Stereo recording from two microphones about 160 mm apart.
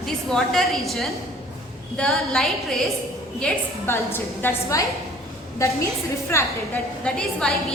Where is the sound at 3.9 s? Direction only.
15° left (ahead or behind).